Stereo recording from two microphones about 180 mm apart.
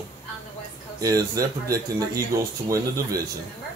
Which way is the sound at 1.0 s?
20° right (ahead or behind).